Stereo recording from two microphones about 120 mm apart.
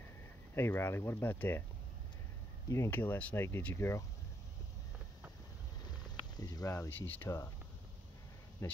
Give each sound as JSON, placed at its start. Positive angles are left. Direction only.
{"t": 0.6, "sound": "speech", "side_deg": 20}
{"t": 2.7, "sound": "speech", "side_deg": 20}
{"t": 6.0, "sound": "boiling", "side_deg": 35}
{"t": 6.9, "sound": "speech", "side_deg": 15}